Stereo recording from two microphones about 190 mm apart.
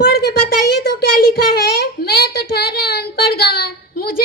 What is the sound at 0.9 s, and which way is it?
Child singing, 55° left (ahead or behind).